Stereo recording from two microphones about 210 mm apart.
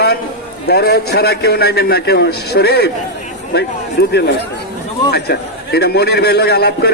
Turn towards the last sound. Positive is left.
turn(degrees=50)  # may be behind; listen again after turning